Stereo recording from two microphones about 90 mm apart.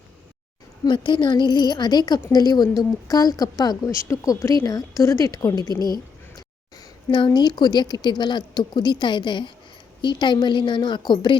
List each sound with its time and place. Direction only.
0.9 s a woman's voice: 60° left (ahead or behind)
3.8 s a woman's voice: 35° left (ahead or behind)
5.7 s a woman's voice: 50° right (ahead or behind)
7.3 s a woman's voice: 50° left (ahead or behind)